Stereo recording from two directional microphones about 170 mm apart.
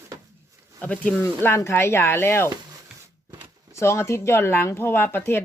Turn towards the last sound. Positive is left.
turn(degrees=15)  # may be behind; listen again after turning